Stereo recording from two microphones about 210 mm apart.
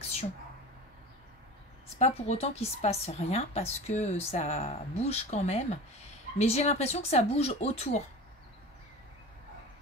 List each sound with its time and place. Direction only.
2.0 s a woman's voice: 30° left (ahead or behind)